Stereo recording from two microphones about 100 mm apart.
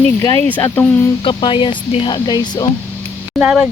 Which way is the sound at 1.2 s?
60° left (ahead or behind).